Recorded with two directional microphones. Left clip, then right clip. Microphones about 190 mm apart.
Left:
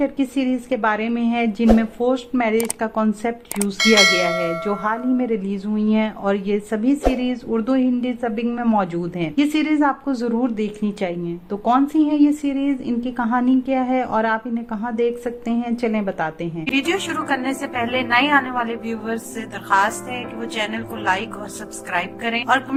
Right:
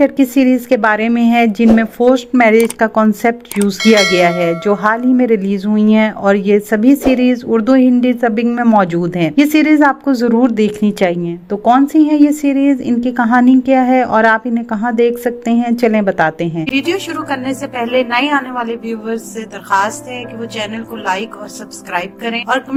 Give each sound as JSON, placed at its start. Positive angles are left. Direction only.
{"t": 0.0, "sound": "speech", "side_deg": -40}
{"t": 3.8, "sound": "speech", "side_deg": 0}
{"t": 4.6, "sound": "speech", "side_deg": -40}
{"t": 16.6, "sound": "a woman's voice", "side_deg": -15}
{"t": 20.6, "sound": "a woman's voice", "side_deg": -15}